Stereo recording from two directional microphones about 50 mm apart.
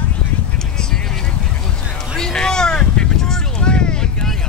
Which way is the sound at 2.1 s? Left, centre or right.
Centre.